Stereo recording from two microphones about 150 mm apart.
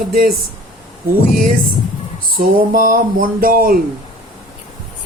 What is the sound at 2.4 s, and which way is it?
Speech, 70° right (ahead or behind).